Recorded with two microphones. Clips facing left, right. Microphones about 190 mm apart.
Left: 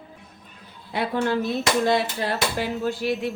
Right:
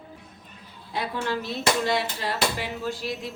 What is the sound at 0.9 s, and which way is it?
Speech, 55° left (ahead or behind).